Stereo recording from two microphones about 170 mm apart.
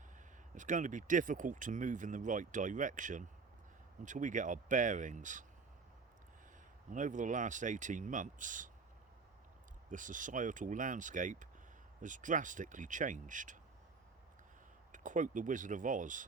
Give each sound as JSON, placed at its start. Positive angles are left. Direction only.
{"t": 0.5, "sound": "speech", "side_deg": -45}
{"t": 6.9, "sound": "speech", "side_deg": -50}
{"t": 9.9, "sound": "speech", "side_deg": -50}
{"t": 14.9, "sound": "speech", "side_deg": -50}